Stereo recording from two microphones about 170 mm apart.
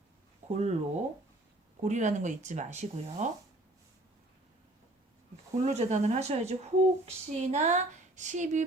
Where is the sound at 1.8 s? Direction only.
45° right (ahead or behind).